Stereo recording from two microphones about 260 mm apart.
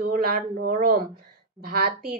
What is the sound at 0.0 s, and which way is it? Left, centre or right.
Speech, right.